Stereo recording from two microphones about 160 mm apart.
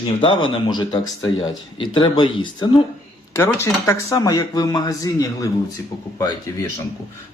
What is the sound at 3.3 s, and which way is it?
Speech, 15° left (ahead or behind).